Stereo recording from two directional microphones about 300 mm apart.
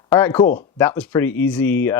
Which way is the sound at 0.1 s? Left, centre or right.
Centre.